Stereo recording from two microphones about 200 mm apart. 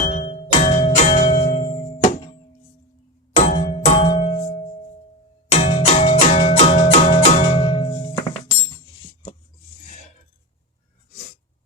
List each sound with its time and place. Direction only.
0.1 s music: 30° left (ahead or behind)
3.3 s music: 35° left (ahead or behind)
5.5 s music: 30° left (ahead or behind)
7.5 s music: 25° left (ahead or behind)